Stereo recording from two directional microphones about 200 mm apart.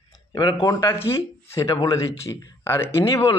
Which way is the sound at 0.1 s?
20° left (ahead or behind).